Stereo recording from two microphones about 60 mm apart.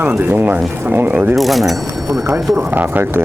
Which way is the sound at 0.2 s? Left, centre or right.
Right.